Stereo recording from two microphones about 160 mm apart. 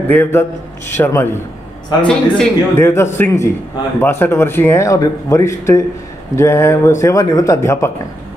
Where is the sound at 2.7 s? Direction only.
15° left (ahead or behind).